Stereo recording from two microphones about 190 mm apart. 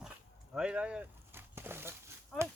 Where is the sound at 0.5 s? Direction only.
5° right (ahead or behind).